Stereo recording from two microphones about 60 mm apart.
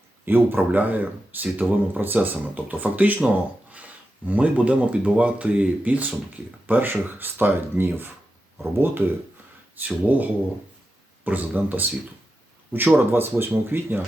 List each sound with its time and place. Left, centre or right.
0.3 s speech: right